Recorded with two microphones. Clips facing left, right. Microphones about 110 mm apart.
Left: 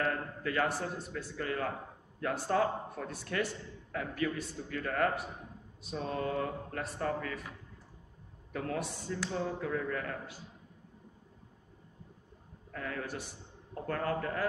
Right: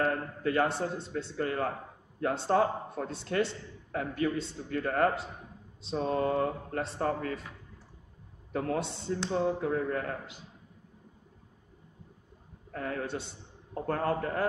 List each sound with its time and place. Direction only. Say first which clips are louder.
0.4 s a man's voice: right 5 dB; 30° right (ahead or behind)
8.5 s speech: right 5 dB; 30° right (ahead or behind)
12.7 s a man's voice: right 4 dB; 35° right (ahead or behind)